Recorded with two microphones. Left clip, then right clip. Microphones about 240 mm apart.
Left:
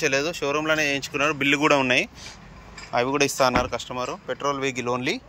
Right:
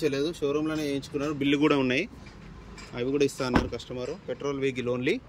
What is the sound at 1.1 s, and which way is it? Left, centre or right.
Speech, left.